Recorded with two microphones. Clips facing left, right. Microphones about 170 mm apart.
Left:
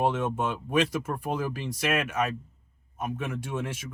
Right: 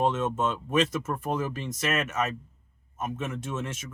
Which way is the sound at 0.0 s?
10° left (ahead or behind).